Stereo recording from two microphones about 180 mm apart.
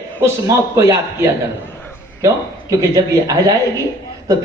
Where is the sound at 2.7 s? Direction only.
20° right (ahead or behind).